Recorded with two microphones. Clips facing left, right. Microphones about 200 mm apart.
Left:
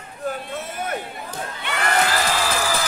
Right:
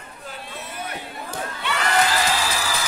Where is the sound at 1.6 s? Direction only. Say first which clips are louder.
Even; 55° left (ahead or behind).